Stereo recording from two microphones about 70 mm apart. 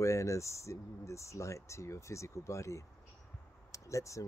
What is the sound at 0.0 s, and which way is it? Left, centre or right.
Speech, left.